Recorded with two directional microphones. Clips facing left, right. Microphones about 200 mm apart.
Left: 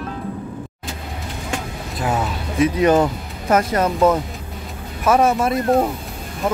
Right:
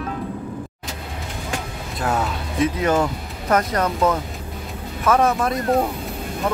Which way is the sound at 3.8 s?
25° left (ahead or behind).